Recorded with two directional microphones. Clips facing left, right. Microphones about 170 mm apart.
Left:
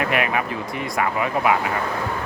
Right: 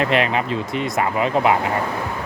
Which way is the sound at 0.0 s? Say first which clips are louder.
Right 3 dB; 25° right (ahead or behind).